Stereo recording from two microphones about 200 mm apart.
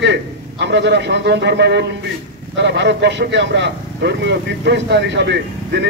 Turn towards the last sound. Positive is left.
turn(degrees=-60)  # may be behind; listen again after turning